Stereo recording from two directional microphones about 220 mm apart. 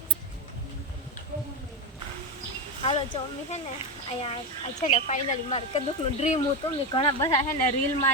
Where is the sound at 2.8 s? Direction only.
25° left (ahead or behind).